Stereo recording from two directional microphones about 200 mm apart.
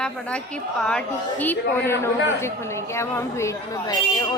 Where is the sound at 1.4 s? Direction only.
10° left (ahead or behind).